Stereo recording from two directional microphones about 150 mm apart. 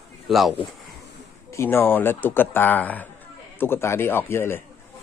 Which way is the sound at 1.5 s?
15° left (ahead or behind).